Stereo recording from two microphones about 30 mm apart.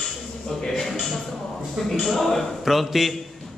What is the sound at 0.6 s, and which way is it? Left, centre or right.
Music, centre.